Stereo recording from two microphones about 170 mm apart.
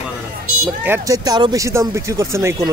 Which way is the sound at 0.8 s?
15° right (ahead or behind).